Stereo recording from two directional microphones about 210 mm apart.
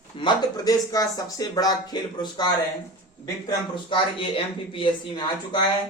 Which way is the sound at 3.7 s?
25° left (ahead or behind).